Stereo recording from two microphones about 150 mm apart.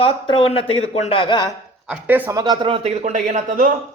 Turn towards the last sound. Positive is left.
turn(degrees=-55)  # may be behind; listen again after turning